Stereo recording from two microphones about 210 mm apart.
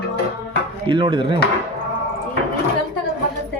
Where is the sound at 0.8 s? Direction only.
20° right (ahead or behind).